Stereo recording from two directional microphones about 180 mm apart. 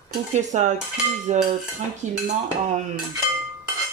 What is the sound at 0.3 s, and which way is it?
Speech, 40° right (ahead or behind).